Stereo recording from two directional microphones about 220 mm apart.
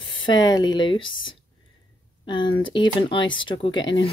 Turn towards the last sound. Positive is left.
turn(degrees=20)  # may be behind; listen again after turning